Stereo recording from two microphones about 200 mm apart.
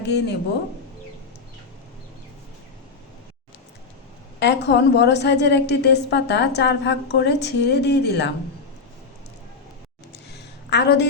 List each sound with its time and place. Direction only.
0.0 s a woman's voice: 55° left (ahead or behind)
4.4 s a woman's voice: 60° left (ahead or behind)
10.7 s a woman's voice: 60° left (ahead or behind)